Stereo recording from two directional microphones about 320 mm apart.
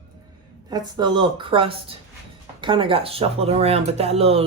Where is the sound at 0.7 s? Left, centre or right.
Centre.